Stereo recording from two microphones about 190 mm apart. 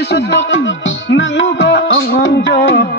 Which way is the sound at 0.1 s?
70° left (ahead or behind).